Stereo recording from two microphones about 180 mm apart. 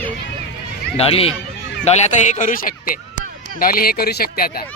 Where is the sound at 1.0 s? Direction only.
35° left (ahead or behind).